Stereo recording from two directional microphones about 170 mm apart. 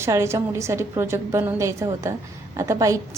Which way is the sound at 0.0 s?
15° right (ahead or behind).